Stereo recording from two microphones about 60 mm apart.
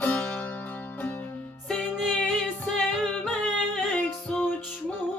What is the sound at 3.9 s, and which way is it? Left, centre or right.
Music, centre.